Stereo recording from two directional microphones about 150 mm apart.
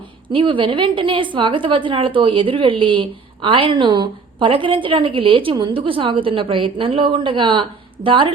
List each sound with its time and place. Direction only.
0.3 s a woman's voice: 35° right (ahead or behind)